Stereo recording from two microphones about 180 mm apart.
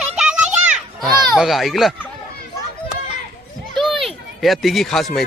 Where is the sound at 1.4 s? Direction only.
Centre (ahead or behind).